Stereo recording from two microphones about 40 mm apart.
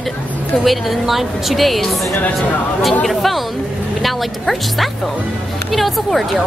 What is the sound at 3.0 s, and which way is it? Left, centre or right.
A woman's voice, centre.